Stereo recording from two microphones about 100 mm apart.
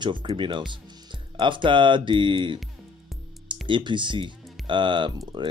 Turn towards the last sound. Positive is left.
turn(degrees=-50)  # may be behind; listen again after turning